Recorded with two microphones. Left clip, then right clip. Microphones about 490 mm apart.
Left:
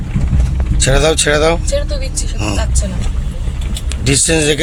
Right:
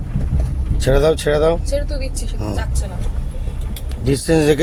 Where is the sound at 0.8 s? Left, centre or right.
Right.